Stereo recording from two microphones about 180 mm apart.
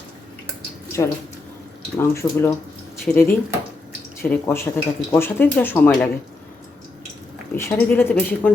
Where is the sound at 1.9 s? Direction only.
15° left (ahead or behind).